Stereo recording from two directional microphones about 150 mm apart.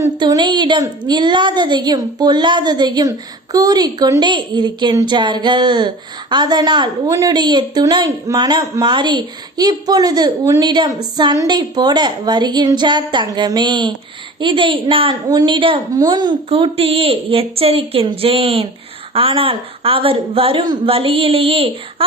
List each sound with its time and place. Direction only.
0.0 s a woman's voice: 25° right (ahead or behind)